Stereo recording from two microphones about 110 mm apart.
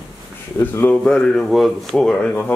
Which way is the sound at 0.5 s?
25° left (ahead or behind).